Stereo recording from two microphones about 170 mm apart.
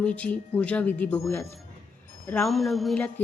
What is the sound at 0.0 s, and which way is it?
A woman's voice, 5° left (ahead or behind).